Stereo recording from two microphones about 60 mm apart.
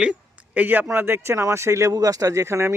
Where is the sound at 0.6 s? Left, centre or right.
Right.